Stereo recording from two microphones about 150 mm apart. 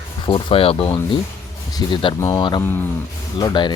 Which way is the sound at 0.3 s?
35° left (ahead or behind).